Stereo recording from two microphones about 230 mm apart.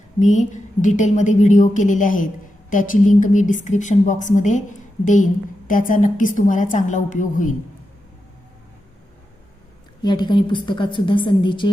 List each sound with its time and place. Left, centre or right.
0.2 s a woman's voice: left
10.0 s a woman's voice: centre